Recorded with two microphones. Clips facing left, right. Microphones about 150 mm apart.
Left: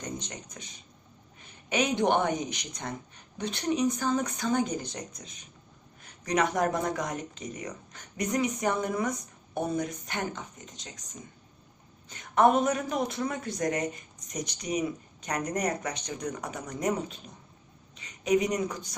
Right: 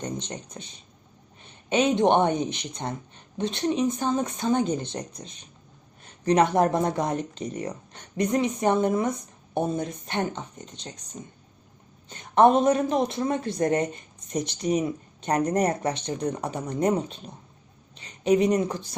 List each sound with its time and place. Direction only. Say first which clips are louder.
0.0 s speech: right 5 dB; 30° right (ahead or behind)
1.7 s a woman's voice: right 5 dB; 25° right (ahead or behind)